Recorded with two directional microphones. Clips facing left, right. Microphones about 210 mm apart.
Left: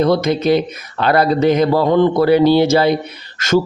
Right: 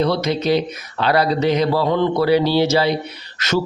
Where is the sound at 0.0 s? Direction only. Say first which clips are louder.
Left 4 dB; 50° left (ahead or behind).